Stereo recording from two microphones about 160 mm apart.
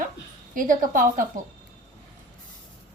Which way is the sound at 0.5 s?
55° right (ahead or behind).